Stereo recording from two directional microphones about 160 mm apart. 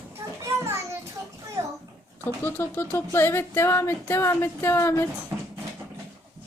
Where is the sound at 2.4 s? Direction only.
15° left (ahead or behind).